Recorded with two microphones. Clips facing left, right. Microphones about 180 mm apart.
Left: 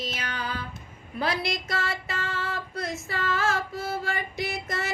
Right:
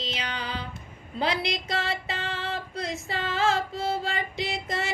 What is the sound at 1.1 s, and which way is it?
Female singing, 20° right (ahead or behind).